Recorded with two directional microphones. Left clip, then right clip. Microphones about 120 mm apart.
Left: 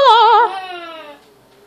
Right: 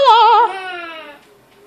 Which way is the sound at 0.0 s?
30° left (ahead or behind).